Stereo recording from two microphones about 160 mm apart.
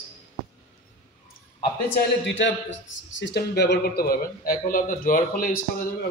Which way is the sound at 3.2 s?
90° left.